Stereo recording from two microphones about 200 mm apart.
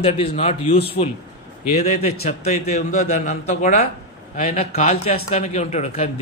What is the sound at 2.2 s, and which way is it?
Speech, 35° left (ahead or behind).